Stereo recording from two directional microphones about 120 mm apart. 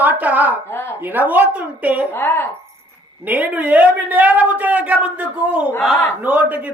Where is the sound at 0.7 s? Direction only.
20° left (ahead or behind).